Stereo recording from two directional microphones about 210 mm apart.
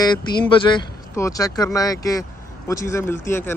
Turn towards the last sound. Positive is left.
turn(degrees=10)  # may be behind; listen again after turning